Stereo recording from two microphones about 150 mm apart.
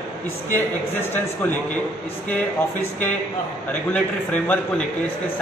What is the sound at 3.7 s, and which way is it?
Speech, 10° left (ahead or behind).